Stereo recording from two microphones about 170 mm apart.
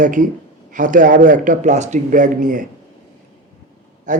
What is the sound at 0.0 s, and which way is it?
A man's voice, 50° right (ahead or behind).